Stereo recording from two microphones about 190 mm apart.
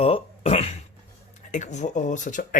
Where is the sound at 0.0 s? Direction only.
30° left (ahead or behind).